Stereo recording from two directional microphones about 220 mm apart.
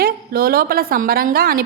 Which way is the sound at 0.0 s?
45° right (ahead or behind).